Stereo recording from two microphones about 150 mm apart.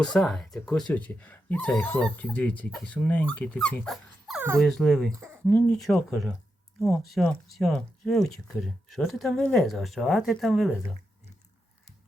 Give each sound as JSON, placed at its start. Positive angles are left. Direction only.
{"t": 0.0, "sound": "speech", "side_deg": 5}
{"t": 5.1, "sound": "speech", "side_deg": -20}
{"t": 5.5, "sound": "speech", "side_deg": 10}